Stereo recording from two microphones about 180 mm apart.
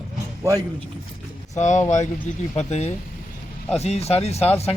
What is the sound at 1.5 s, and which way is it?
Speech, 40° left (ahead or behind).